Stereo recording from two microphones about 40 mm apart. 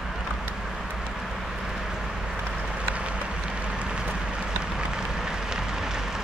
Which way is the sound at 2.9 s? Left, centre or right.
Right.